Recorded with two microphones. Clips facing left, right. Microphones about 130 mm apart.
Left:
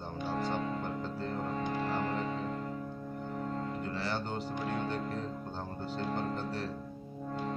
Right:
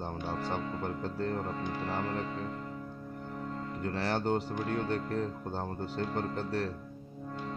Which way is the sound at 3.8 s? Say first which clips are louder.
Right 5 dB; 65° right (ahead or behind).